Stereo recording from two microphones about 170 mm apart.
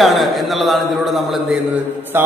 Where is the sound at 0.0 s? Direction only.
Centre (ahead or behind).